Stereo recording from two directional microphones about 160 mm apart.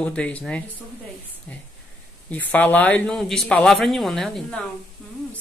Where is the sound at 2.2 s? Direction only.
10° left (ahead or behind).